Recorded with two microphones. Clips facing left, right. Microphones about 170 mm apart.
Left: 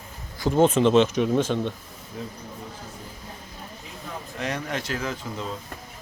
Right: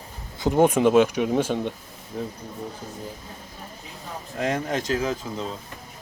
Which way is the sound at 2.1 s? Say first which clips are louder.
Right 5 dB; 40° right (ahead or behind).